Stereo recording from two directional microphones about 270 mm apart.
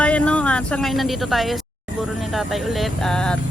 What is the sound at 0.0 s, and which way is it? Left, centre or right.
A woman's voice, centre.